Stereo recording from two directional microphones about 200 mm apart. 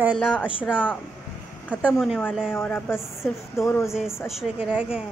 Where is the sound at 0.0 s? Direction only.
5° right (ahead or behind).